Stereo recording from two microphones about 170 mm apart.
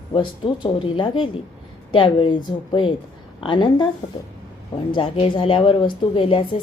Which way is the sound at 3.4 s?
30° left (ahead or behind).